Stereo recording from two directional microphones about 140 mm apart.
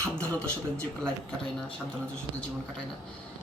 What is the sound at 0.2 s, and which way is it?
Speech, 10° left (ahead or behind).